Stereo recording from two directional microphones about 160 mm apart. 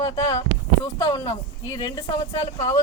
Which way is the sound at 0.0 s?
25° left (ahead or behind).